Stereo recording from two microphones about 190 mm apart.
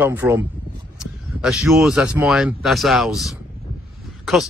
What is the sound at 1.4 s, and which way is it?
A man's voice, 5° right (ahead or behind).